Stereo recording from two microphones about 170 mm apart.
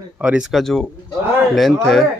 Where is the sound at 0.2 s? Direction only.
5° right (ahead or behind).